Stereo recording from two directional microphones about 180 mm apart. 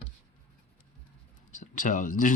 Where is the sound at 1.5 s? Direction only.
45° left (ahead or behind).